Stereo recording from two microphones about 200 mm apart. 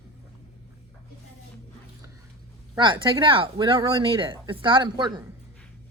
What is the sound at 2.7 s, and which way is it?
Speech, 25° right (ahead or behind).